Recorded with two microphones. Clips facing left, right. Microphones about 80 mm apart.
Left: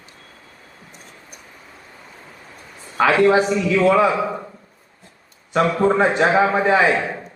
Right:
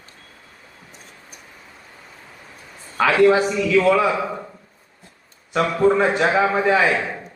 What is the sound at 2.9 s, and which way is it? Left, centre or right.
Speech, left.